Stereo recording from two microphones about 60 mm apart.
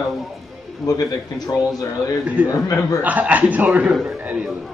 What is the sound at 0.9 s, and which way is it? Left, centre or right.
Speech, left.